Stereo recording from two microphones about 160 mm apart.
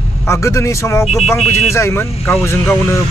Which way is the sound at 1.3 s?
Centre (ahead or behind).